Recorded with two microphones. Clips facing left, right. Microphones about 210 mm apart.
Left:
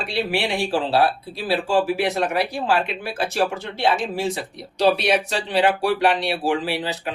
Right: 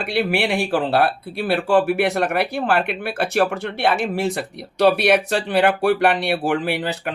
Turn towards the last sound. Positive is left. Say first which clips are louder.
# right 2 dB
turn(degrees=-55)  # may be behind; listen again after turning